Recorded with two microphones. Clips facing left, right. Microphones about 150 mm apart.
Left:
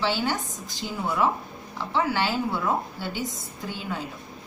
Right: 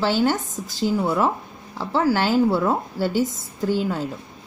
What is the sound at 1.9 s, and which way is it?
Speech, 40° right (ahead or behind).